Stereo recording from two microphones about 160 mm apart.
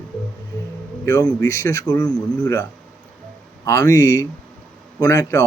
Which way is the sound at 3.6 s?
20° left (ahead or behind).